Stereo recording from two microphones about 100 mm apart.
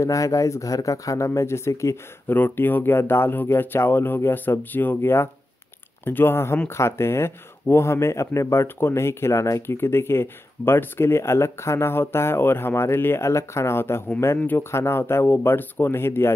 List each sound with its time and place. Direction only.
0.0 s speech: 35° left (ahead or behind)
2.3 s speech: 20° left (ahead or behind)